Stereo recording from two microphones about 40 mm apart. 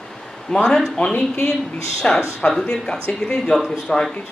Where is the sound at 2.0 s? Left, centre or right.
Left.